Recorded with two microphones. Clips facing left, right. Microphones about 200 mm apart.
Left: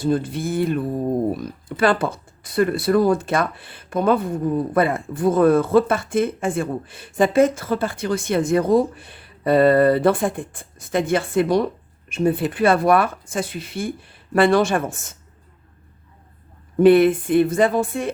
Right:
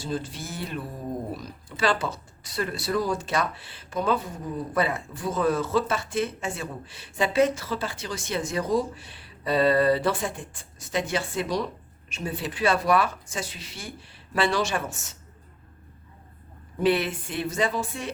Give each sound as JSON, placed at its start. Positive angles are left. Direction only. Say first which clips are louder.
{"t": 0.0, "sound": "a sound", "louder": "left 10 dB", "side_deg": 55}
{"t": 1.4, "sound": "speech", "louder": "left 8 dB", "side_deg": 55}
{"t": 16.7, "sound": "speech", "louder": "left 11 dB", "side_deg": 50}